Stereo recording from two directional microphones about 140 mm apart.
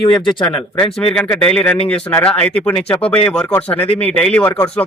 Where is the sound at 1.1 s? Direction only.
5° left (ahead or behind).